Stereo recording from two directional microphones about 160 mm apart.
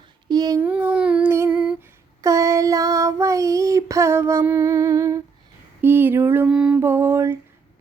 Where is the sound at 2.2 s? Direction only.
20° right (ahead or behind).